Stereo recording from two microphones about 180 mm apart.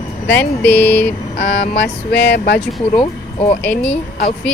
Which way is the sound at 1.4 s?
80° left.